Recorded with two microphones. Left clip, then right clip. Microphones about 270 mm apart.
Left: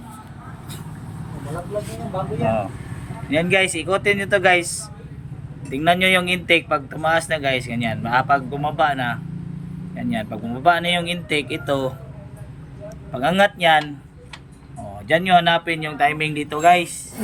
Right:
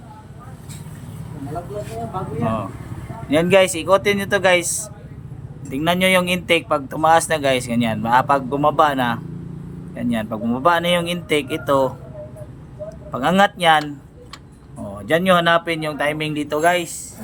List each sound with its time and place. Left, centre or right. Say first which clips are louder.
3.2 s speech: right 4 dB; centre
5.7 s speech: even; centre
13.1 s speech: right 1 dB; centre
15.0 s speech: even; centre